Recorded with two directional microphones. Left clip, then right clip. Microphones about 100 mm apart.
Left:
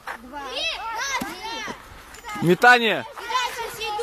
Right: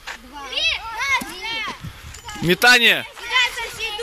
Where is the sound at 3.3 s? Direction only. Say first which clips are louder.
Right 6 dB; 90° left.